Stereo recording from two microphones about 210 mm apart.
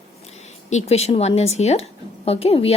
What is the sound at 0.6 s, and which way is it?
A woman's voice, 30° left (ahead or behind).